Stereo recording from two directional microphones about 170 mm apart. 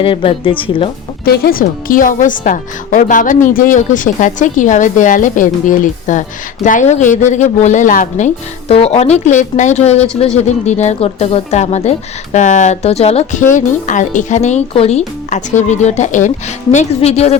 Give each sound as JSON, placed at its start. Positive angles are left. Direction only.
{"t": 0.0, "sound": "a woman's voice", "side_deg": 30}
{"t": 1.2, "sound": "speech", "side_deg": 60}
{"t": 8.6, "sound": "a woman's voice", "side_deg": 35}